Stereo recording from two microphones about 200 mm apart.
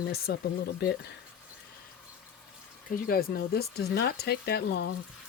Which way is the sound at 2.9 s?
45° left (ahead or behind).